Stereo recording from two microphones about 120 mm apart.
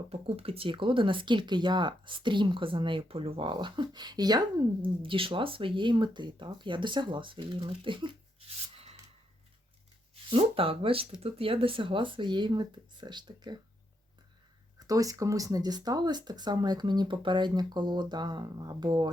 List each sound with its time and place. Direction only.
0.1 s speech: 55° right (ahead or behind); by 4.9 s 35° right (ahead or behind)
5.0 s speech: 45° right (ahead or behind)
8.4 s rub: 55° right (ahead or behind)
10.2 s speech: 50° right (ahead or behind)
14.8 s speech: 30° right (ahead or behind)